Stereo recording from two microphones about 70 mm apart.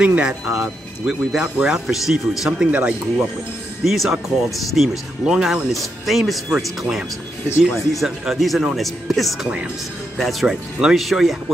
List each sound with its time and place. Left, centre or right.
0.0 s speech: centre
2.7 s speech: centre
3.8 s speech: centre
5.7 s speech: centre